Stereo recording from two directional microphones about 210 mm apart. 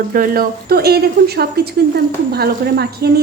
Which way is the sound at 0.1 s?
45° right (ahead or behind).